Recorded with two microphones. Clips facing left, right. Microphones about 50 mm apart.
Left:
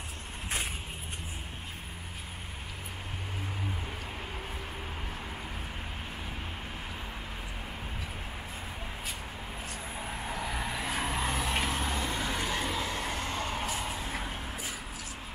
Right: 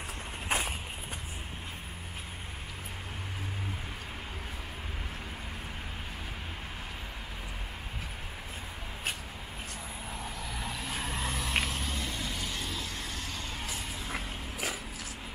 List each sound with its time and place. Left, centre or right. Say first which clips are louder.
10.0 s vehicle: left 5 dB; left